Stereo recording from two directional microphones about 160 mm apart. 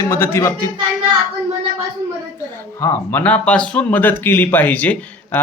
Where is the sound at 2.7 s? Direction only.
15° left (ahead or behind).